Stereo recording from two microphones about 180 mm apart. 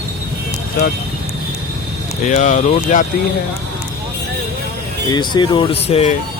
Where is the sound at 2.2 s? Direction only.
40° left (ahead or behind).